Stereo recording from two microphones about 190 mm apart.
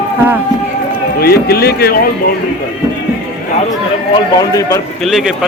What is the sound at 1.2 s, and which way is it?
Speech, 55° left (ahead or behind).